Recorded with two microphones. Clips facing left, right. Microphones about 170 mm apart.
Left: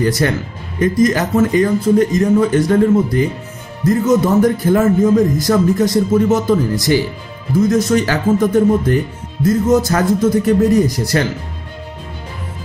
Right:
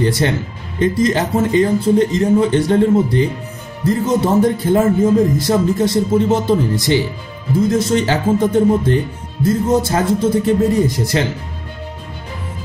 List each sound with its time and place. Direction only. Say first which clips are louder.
0.0 s speech: left 1 dB; 25° right (ahead or behind)